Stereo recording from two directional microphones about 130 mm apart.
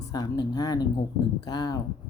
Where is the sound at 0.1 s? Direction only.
30° left (ahead or behind).